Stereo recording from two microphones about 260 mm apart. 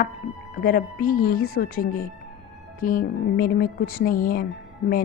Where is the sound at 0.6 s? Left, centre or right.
Left.